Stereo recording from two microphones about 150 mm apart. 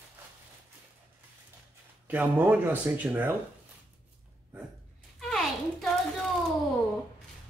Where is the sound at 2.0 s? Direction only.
10° right (ahead or behind).